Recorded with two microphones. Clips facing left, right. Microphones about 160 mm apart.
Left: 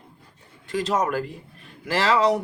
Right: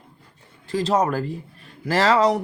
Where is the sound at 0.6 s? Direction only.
30° right (ahead or behind).